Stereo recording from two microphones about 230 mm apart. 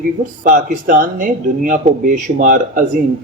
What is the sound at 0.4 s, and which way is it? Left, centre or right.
Speech, right.